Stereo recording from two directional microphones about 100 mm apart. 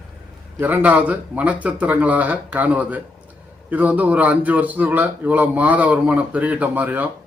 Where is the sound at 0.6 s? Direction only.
15° right (ahead or behind).